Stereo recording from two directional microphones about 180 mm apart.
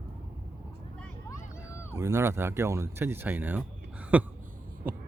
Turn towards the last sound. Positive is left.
turn(degrees=-10)  # may be behind; listen again after turning